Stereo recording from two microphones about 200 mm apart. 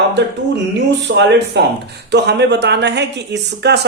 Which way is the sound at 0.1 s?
60° right (ahead or behind).